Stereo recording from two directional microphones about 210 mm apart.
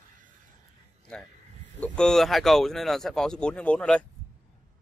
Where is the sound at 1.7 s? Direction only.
5° left (ahead or behind).